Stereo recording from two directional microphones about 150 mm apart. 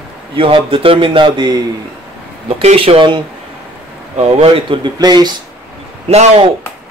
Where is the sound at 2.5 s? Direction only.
40° right (ahead or behind).